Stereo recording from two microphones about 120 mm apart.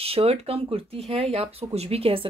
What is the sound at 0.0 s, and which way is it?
Speech, 55° right (ahead or behind).